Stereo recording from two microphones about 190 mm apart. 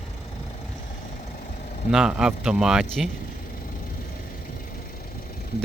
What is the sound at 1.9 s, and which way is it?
Speech, 5° right (ahead or behind).